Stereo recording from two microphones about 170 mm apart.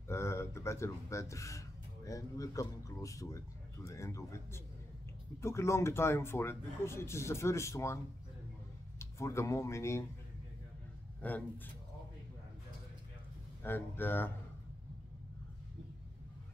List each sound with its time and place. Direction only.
0.1 s speech: 15° left (ahead or behind)
11.1 s speech: 10° left (ahead or behind)
13.6 s speech: 10° left (ahead or behind)